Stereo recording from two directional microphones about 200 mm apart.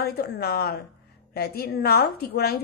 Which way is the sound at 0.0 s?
50° left (ahead or behind).